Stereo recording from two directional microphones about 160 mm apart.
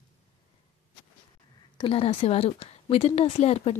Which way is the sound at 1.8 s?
35° left (ahead or behind).